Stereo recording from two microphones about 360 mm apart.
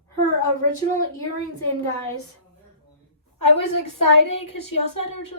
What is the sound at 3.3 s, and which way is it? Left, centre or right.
A woman's voice, left.